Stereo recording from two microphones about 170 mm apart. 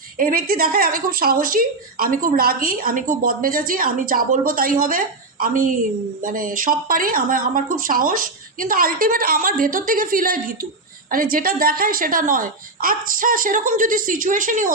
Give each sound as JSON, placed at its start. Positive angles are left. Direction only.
{"t": 0.2, "sound": "speech", "side_deg": -55}